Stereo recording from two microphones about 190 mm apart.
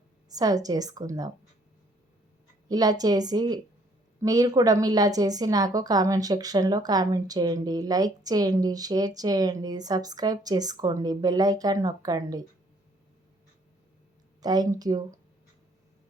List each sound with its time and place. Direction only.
0.3 s a woman's voice: 20° right (ahead or behind)
2.6 s a woman's voice: 20° right (ahead or behind)
14.4 s a woman's voice: 20° right (ahead or behind)